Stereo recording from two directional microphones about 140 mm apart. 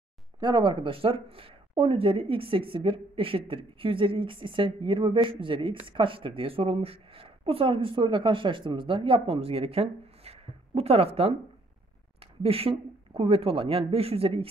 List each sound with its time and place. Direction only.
0.4 s a woman's voice: 35° right (ahead or behind)